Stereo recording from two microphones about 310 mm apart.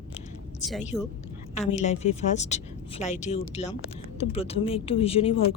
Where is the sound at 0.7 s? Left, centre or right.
Centre.